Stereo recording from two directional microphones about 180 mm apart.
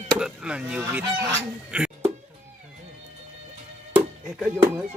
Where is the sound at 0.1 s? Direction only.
5° right (ahead or behind).